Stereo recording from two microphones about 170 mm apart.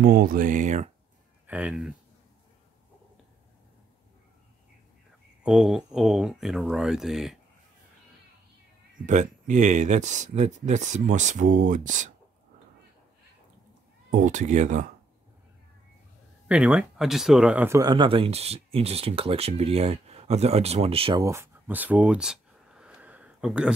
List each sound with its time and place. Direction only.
0.0 s speech: 60° right (ahead or behind); by 0.8 s 45° right (ahead or behind)
1.5 s speech: 5° right (ahead or behind)
5.4 s speech: 5° right (ahead or behind)
9.0 s speech: 45° right (ahead or behind)
14.1 s speech: 45° right (ahead or behind)
16.4 s speech: 5° right (ahead or behind); by 21.2 s 35° right (ahead or behind)
21.2 s a sound: 15° right (ahead or behind)